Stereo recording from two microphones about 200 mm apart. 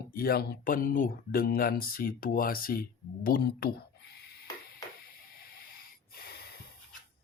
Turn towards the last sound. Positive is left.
turn(degrees=50)  # may be behind; listen again after turning